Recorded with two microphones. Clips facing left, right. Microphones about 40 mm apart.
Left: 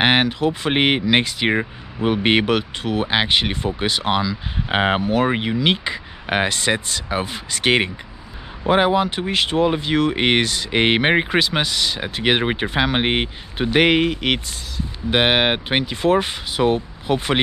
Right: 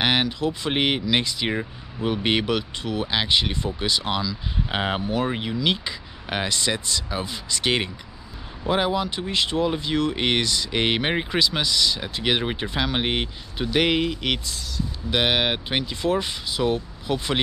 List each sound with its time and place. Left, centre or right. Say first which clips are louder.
0.0 s speech: left 5 dB; left
5.0 s speech: left 6 dB; left
5.3 s speech: left 5 dB; left